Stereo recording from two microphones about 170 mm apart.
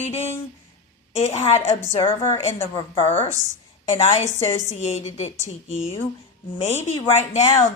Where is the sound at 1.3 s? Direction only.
40° left (ahead or behind).